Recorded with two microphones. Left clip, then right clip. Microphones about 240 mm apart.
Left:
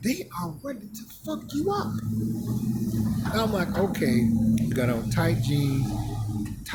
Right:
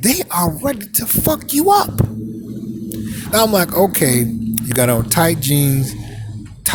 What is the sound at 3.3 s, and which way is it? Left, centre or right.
Speech, right.